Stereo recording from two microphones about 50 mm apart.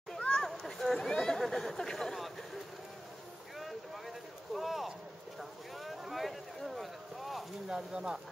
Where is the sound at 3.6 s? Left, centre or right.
Centre.